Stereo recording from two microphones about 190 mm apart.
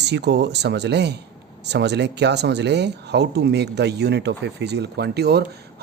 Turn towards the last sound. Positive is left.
turn(degrees=-60)  # may be behind; listen again after turning